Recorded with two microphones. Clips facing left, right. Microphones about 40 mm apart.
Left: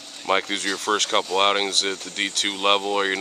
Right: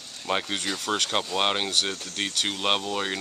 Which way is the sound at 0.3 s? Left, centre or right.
Centre.